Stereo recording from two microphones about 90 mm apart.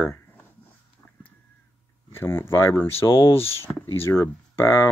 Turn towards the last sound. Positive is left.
turn(degrees=30)  # may be behind; listen again after turning